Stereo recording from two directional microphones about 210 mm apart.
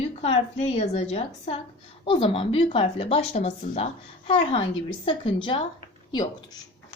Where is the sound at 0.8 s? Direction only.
30° left (ahead or behind).